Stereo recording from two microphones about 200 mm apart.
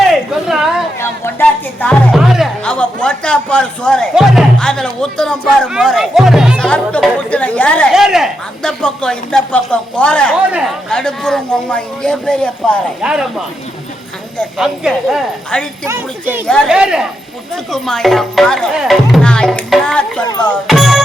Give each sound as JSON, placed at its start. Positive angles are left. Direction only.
{"t": 0.1, "sound": "a sound", "side_deg": 0}
{"t": 1.0, "sound": "speech", "side_deg": 10}
{"t": 16.5, "sound": "speech", "side_deg": 0}
{"t": 20.2, "sound": "music", "side_deg": 20}
{"t": 20.5, "sound": "speech", "side_deg": 0}